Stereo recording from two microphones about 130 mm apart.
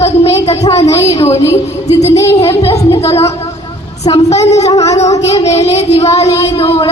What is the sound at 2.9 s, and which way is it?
A woman's voice, 50° left (ahead or behind).